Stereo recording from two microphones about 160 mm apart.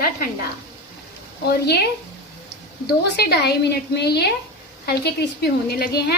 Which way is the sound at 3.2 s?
80° left.